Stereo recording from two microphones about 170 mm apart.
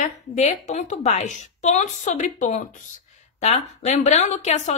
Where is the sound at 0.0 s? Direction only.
45° left (ahead or behind).